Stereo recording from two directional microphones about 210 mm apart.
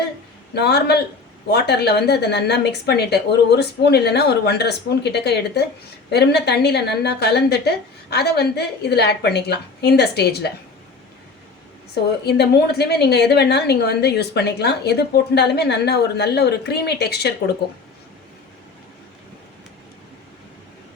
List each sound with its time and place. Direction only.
0.5 s a woman's voice: 50° left (ahead or behind)
12.2 s a woman's voice: 50° left (ahead or behind)